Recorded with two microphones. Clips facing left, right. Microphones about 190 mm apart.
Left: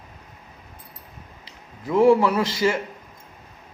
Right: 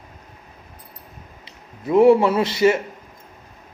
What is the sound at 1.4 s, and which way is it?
A man's voice, 25° right (ahead or behind).